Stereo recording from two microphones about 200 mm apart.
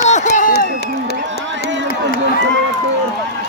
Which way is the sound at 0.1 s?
40° left (ahead or behind).